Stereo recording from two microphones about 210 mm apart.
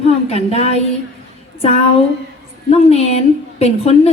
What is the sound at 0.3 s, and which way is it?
Speech, 30° left (ahead or behind).